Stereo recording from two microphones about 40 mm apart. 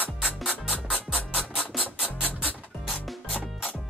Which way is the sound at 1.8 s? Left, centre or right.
Left.